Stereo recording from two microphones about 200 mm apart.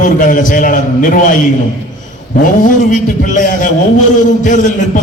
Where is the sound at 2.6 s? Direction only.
40° left (ahead or behind).